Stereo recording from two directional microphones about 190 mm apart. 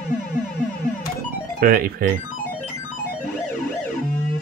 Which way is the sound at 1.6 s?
50° right (ahead or behind).